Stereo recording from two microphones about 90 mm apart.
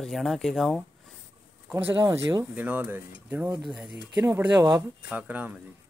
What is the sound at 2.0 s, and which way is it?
Speech, 35° right (ahead or behind).